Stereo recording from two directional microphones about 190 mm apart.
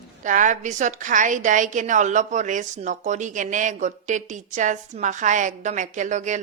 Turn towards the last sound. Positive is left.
turn(degrees=-40)  # may be behind; listen again after turning